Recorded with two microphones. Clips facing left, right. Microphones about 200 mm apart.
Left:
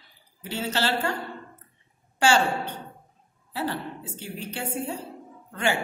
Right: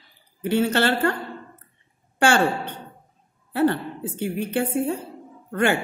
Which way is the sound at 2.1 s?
55° right (ahead or behind).